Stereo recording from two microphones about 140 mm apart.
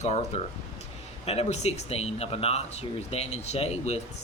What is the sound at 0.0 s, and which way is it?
Speech, 50° left (ahead or behind).